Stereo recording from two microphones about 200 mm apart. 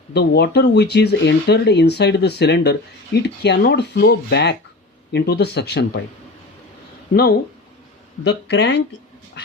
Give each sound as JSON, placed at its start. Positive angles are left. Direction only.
{"t": 0.1, "sound": "speech", "side_deg": 55}
{"t": 7.1, "sound": "speech", "side_deg": 50}